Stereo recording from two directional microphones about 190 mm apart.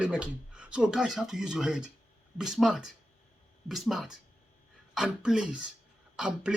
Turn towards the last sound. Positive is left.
turn(degrees=-5)  # may be behind; listen again after turning